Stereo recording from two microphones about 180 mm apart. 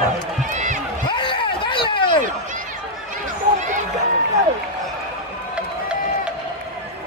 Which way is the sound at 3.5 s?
45° right (ahead or behind).